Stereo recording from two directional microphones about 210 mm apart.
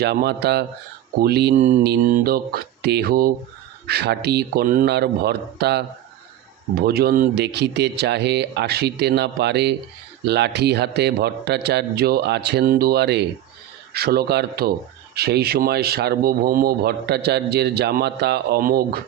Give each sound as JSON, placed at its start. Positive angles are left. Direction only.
{"t": 0.0, "sound": "speech", "side_deg": -50}
{"t": 1.5, "sound": "mantra", "side_deg": -35}
{"t": 1.8, "sound": "speech", "side_deg": -45}